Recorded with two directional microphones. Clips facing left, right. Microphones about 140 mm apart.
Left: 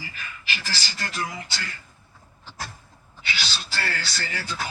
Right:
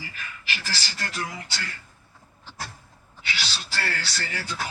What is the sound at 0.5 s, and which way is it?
Speech, 90° left.